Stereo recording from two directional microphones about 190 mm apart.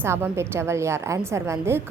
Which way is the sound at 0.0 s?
15° right (ahead or behind).